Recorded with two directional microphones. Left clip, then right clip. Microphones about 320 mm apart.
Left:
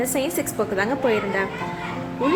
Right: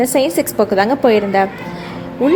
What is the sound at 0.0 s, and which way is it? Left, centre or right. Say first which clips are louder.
A woman's voice: right 9 dB; centre.